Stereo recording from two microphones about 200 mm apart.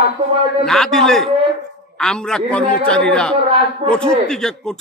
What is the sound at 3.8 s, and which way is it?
Speech, 25° right (ahead or behind).